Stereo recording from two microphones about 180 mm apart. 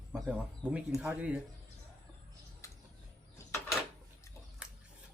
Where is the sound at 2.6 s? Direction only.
15° left (ahead or behind).